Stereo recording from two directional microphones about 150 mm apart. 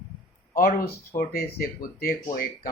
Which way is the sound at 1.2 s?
75° left (ahead or behind).